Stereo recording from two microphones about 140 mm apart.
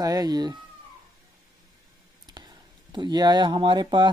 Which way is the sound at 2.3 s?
30° right (ahead or behind).